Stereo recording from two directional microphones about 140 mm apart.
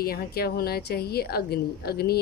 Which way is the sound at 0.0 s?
90° left.